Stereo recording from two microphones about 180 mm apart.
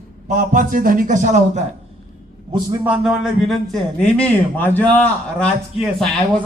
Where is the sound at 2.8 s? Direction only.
5° right (ahead or behind).